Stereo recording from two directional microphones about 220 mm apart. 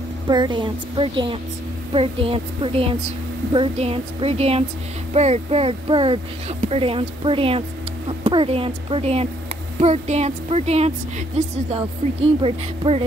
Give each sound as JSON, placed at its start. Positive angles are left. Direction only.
{"t": 0.3, "sound": "a woman's voice", "side_deg": -20}